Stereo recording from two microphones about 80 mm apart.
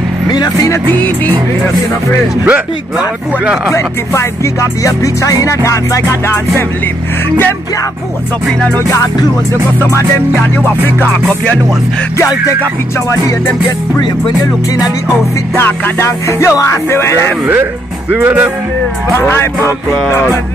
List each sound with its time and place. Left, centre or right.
0.8 s music: left
3.7 s music: left
11.0 s music: centre
15.5 s music: left
18.1 s music: centre
19.1 s music: left